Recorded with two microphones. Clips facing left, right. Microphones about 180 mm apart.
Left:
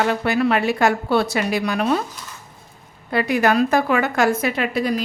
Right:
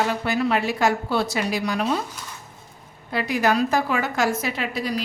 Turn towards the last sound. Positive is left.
turn(degrees=55)  # may be behind; listen again after turning